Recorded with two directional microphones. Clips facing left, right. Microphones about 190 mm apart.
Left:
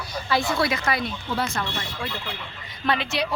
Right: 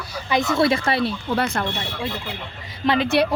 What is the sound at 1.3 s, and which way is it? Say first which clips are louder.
Speech: right 2 dB; 60° right (ahead or behind).